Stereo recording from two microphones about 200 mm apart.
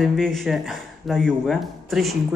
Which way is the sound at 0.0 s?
Centre (ahead or behind).